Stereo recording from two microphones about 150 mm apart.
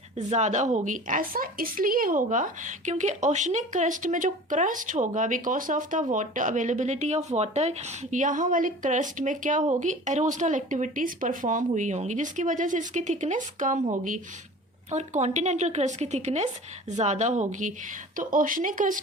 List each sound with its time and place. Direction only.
0.2 s a woman's voice: 50° right (ahead or behind)
14.8 s a woman's voice: 50° right (ahead or behind)